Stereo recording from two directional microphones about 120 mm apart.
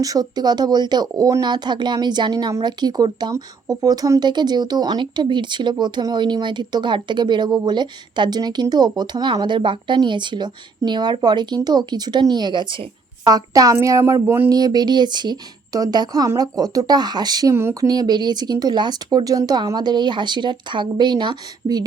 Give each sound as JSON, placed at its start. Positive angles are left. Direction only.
{"t": 0.0, "sound": "speech", "side_deg": -30}
{"t": 13.2, "sound": "a woman's voice", "side_deg": -30}
{"t": 14.5, "sound": "speech", "side_deg": -35}
{"t": 17.5, "sound": "a woman's voice", "side_deg": -20}
{"t": 17.8, "sound": "speech", "side_deg": -35}